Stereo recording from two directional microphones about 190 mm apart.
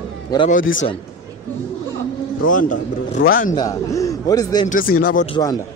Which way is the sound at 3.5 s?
20° left (ahead or behind).